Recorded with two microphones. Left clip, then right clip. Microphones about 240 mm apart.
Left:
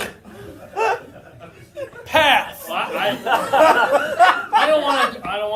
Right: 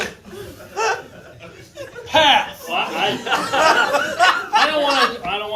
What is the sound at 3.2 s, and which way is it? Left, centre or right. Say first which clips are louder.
Speech: left 3 dB; left.